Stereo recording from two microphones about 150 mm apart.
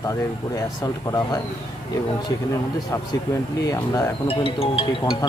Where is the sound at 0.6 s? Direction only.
25° left (ahead or behind).